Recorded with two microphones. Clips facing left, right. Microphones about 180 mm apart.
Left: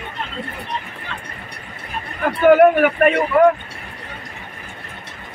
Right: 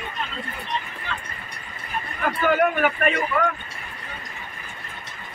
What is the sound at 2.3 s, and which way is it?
A man's voice, 65° left (ahead or behind).